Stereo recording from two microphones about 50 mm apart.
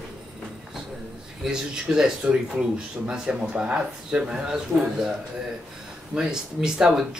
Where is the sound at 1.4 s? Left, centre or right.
Centre.